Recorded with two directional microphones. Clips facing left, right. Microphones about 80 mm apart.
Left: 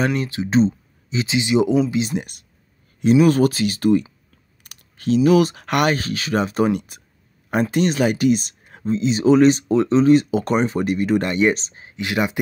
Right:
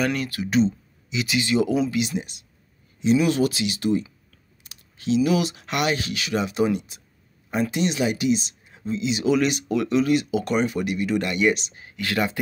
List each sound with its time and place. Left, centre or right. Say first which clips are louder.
0.0 s speech: left 3 dB; left
2.1 s speech: left 3 dB; left; by 12.4 s centre